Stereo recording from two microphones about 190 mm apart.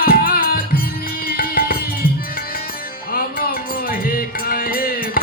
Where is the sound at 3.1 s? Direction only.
50° left (ahead or behind).